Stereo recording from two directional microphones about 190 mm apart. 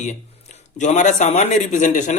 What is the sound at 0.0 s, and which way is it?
Speech, 40° left (ahead or behind).